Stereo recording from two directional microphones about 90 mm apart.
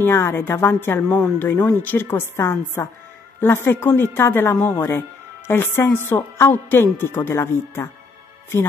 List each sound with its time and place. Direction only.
0.0 s speech: 25° left (ahead or behind)
1.0 s speech: 5° left (ahead or behind)
1.7 s speech: 20° left (ahead or behind)